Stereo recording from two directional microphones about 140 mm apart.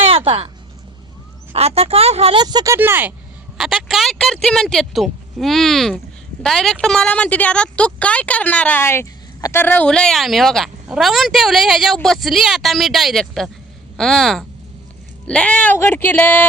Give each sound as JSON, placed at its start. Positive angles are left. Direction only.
{"t": 0.0, "sound": "a sound", "side_deg": -45}
{"t": 1.5, "sound": "speech", "side_deg": -45}
{"t": 2.4, "sound": "speech", "side_deg": -30}
{"t": 2.7, "sound": "speech", "side_deg": -15}
{"t": 3.6, "sound": "a woman's voice", "side_deg": -5}